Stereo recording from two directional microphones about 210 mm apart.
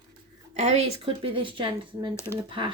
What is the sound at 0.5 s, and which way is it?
Speech, 30° right (ahead or behind).